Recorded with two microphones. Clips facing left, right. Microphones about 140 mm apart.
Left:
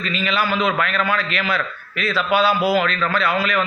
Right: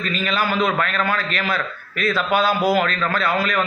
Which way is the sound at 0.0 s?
45° right (ahead or behind).